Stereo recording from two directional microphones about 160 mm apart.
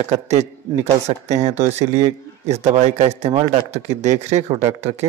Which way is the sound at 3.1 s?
40° right (ahead or behind).